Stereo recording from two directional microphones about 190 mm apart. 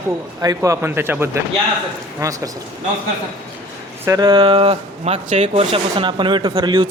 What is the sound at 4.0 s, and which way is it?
A man's voice, 20° right (ahead or behind).